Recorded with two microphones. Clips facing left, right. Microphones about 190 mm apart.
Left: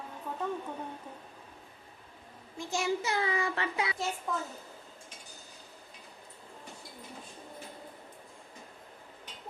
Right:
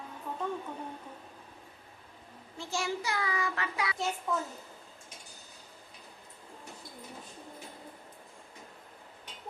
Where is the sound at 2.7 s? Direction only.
20° left (ahead or behind).